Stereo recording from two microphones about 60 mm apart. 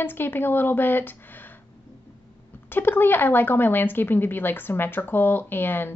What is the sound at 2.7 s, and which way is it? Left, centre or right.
Speech, left.